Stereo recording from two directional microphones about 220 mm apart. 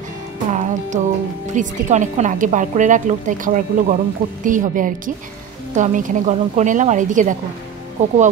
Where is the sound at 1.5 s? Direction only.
35° right (ahead or behind).